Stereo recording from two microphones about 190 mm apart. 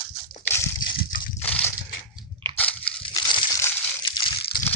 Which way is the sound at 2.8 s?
25° left (ahead or behind).